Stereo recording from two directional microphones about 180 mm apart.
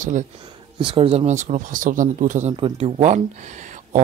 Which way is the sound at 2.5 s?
30° right (ahead or behind).